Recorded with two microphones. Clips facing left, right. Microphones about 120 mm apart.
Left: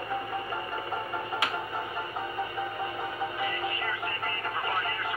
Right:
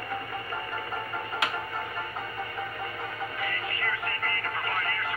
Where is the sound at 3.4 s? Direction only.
15° left (ahead or behind).